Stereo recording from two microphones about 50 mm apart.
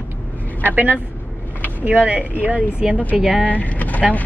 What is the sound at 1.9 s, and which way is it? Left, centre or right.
Speech, right.